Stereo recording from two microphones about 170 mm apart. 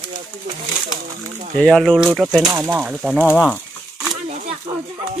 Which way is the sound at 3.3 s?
10° left (ahead or behind).